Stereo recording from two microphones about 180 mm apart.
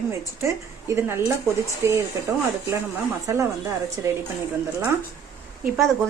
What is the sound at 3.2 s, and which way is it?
Speech, 15° right (ahead or behind).